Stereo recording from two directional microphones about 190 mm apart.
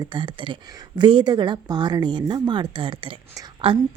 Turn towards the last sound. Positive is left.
turn(degrees=-25)  # may be behind; listen again after turning